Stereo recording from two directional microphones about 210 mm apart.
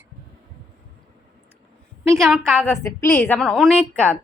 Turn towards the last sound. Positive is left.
turn(degrees=5)  # may be behind; listen again after turning